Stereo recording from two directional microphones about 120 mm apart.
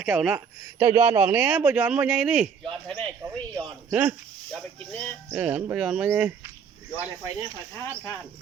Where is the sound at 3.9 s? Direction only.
15° right (ahead or behind).